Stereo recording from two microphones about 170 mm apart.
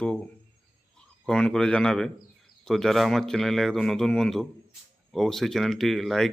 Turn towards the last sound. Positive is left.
turn(degrees=0)  # may be behind; listen again after turning